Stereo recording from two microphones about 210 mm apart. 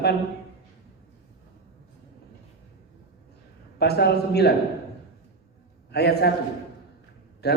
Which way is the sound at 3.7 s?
50° left (ahead or behind).